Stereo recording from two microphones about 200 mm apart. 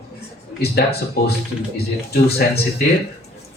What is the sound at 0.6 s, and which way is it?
A man's voice, 50° left (ahead or behind).